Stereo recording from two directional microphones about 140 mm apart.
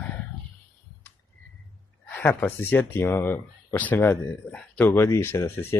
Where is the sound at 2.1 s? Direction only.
15° left (ahead or behind).